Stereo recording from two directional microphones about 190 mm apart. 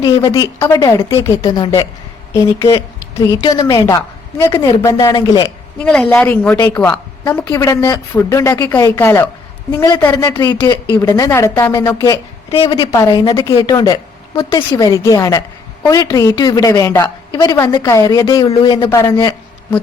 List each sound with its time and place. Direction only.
0.0 s a woman's voice: 20° left (ahead or behind)
5.8 s a woman's voice: 5° left (ahead or behind)